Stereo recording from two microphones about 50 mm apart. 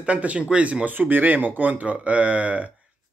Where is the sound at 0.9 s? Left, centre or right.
Right.